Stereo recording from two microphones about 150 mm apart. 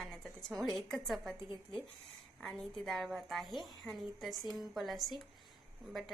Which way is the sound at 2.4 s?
5° left (ahead or behind).